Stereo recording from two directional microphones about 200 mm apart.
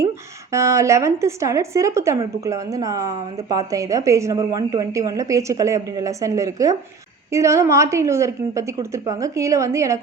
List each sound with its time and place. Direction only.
0.5 s a woman's voice: 15° right (ahead or behind)